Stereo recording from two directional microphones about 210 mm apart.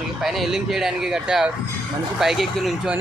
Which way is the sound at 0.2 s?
Centre (ahead or behind).